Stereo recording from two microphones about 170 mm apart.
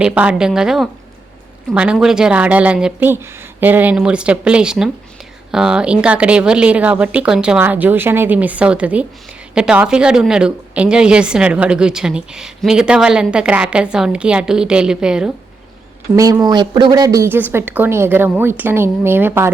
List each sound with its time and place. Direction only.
0.0 s a woman's voice: 5° right (ahead or behind)
16.1 s a woman's voice: 20° right (ahead or behind)